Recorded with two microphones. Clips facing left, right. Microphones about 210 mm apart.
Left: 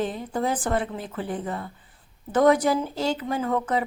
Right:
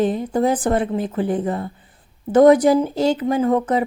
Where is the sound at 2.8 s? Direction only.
15° right (ahead or behind).